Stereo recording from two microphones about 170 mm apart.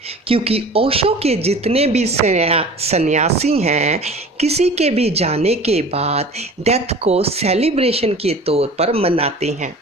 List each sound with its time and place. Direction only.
0.3 s speech: 35° right (ahead or behind)